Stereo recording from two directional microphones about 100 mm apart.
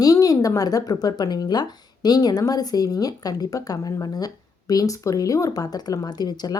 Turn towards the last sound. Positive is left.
turn(degrees=40)  # may be behind; listen again after turning